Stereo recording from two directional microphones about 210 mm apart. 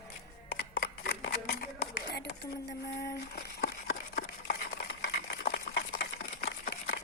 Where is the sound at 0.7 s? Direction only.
50° left (ahead or behind).